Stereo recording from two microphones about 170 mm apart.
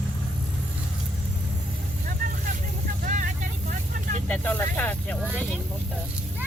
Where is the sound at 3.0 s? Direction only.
50° right (ahead or behind).